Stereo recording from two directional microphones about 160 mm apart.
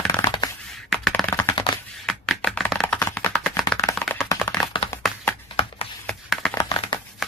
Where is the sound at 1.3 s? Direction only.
20° left (ahead or behind).